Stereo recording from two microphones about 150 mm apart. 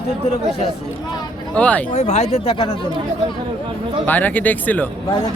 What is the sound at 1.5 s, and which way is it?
Speech, 10° left (ahead or behind).